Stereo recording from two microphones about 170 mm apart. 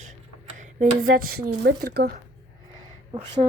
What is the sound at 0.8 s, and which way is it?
Speech, 55° right (ahead or behind).